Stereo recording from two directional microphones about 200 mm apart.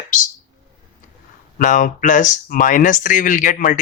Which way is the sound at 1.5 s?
40° left (ahead or behind).